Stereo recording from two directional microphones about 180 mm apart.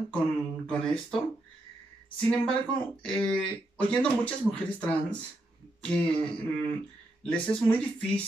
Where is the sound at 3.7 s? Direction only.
5° left (ahead or behind).